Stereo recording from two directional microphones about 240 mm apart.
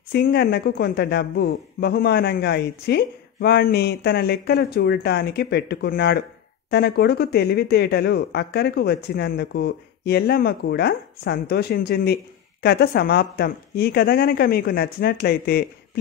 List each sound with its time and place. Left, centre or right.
0.1 s speech: left